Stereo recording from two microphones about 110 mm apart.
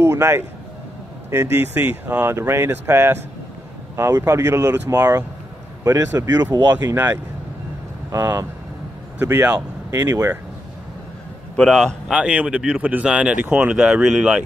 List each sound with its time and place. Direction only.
0.0 s speech: 25° right (ahead or behind)
11.5 s a man's voice: 5° left (ahead or behind)
12.1 s speech: 10° right (ahead or behind)